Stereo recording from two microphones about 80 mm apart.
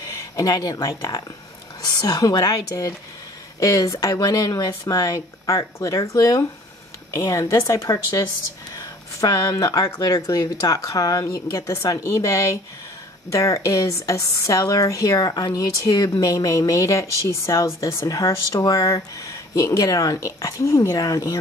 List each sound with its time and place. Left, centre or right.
0.4 s speech: left